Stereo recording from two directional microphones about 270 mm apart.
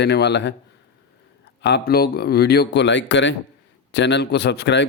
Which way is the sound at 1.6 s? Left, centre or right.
Left.